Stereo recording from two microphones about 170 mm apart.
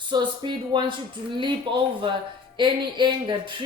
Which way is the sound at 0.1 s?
25° right (ahead or behind).